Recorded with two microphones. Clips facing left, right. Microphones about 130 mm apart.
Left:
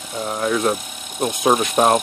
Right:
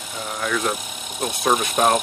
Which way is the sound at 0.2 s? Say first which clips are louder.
Left 5 dB; 30° left (ahead or behind).